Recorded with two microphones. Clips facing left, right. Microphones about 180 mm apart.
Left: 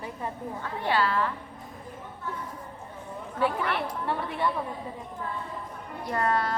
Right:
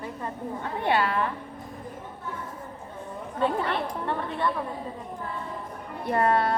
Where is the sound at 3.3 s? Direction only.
25° right (ahead or behind).